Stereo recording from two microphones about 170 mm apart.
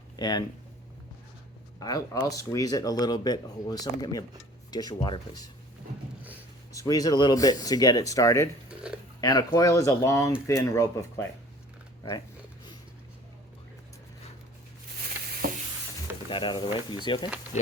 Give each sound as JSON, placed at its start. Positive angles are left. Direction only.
{"t": 0.2, "sound": "speech", "side_deg": 25}
{"t": 1.8, "sound": "speech", "side_deg": 20}
{"t": 6.7, "sound": "speech", "side_deg": 20}
{"t": 8.7, "sound": "a sound", "side_deg": -5}
{"t": 9.2, "sound": "speech", "side_deg": 25}
{"t": 15.4, "sound": "a sound", "side_deg": -60}
{"t": 16.3, "sound": "speech", "side_deg": 25}